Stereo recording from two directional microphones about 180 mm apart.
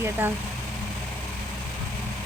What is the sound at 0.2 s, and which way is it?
Speech, 15° right (ahead or behind).